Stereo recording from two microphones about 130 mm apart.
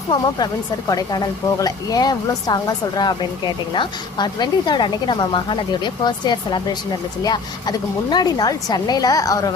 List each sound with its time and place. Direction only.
0.9 s a woman's voice: 30° left (ahead or behind)